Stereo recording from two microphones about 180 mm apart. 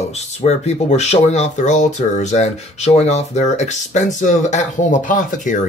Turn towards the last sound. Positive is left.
turn(degrees=45)  # may be behind; listen again after turning